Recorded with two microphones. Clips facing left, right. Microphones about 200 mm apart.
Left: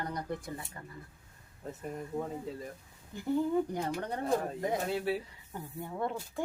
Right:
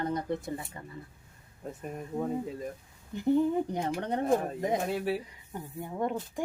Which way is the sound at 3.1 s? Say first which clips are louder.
Right 4 dB; 20° right (ahead or behind).